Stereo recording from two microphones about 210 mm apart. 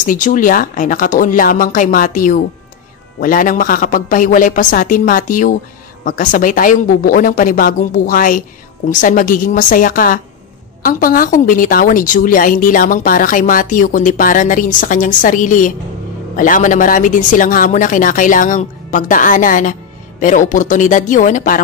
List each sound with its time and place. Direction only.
0.0 s speech: 40° left (ahead or behind)